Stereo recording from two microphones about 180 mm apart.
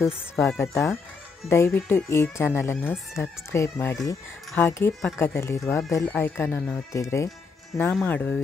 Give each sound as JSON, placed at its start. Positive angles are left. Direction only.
{"t": 0.0, "sound": "speech", "side_deg": 15}